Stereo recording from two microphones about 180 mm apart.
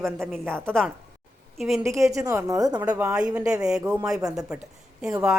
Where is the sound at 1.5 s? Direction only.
Centre (ahead or behind).